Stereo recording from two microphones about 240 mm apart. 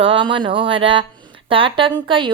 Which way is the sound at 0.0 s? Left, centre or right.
Right.